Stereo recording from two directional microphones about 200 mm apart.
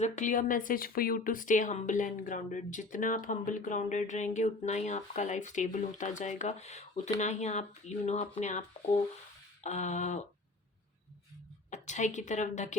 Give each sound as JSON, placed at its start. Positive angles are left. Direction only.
{"t": 0.0, "sound": "speech", "side_deg": 40}
{"t": 9.6, "sound": "speech", "side_deg": 35}
{"t": 11.7, "sound": "speech", "side_deg": 35}